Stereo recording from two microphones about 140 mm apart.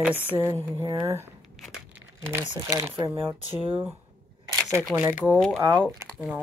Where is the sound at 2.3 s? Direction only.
25° right (ahead or behind).